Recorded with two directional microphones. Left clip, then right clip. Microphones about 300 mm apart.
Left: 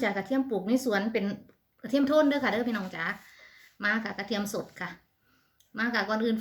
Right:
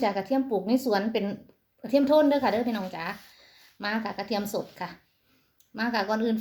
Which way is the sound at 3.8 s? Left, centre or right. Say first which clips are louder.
Left 1 dB; centre.